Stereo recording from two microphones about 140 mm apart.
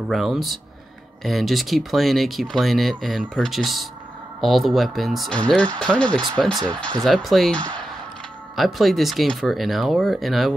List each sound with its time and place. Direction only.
0.1 s speech: centre (ahead or behind)